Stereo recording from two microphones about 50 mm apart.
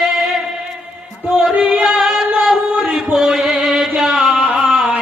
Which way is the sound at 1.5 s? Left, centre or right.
Centre.